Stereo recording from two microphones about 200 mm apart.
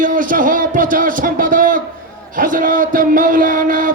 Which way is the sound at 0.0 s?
40° right (ahead or behind).